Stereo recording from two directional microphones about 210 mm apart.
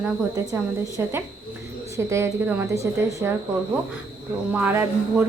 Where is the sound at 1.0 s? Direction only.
10° right (ahead or behind).